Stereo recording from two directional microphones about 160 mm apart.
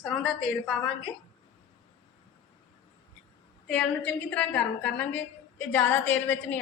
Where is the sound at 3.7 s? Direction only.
5° left (ahead or behind).